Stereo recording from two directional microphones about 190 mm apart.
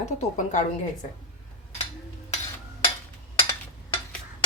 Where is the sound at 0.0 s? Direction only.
40° left (ahead or behind).